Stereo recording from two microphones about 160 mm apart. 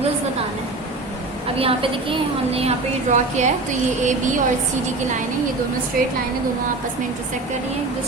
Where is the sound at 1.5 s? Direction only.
35° right (ahead or behind).